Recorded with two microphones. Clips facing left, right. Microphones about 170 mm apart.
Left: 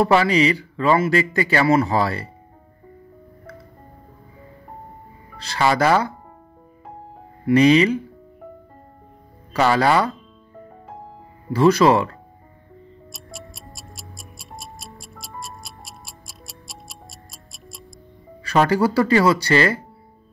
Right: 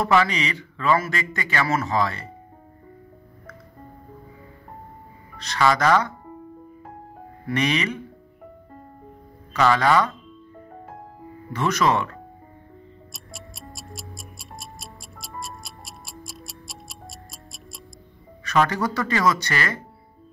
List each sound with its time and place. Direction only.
0.0 s a man's voice: 35° left (ahead or behind)
5.4 s a man's voice: 30° left (ahead or behind)
7.4 s a man's voice: 30° left (ahead or behind)
9.5 s a man's voice: 35° left (ahead or behind)
11.5 s a man's voice: 30° left (ahead or behind)
13.1 s tick-tock: centre (ahead or behind)
18.4 s a man's voice: 30° left (ahead or behind)